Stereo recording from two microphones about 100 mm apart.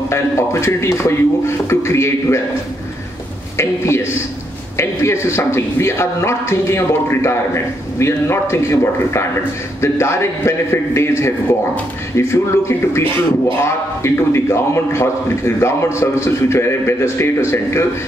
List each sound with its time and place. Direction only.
0.1 s a man's voice: 25° left (ahead or behind)
3.5 s a man's voice: 25° left (ahead or behind)